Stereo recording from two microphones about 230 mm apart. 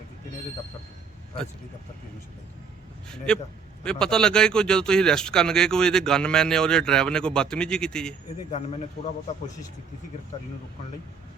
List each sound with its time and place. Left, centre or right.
3.8 s speech: centre
8.4 s speech: left